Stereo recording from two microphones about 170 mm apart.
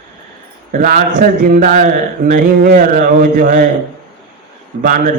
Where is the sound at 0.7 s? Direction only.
50° right (ahead or behind).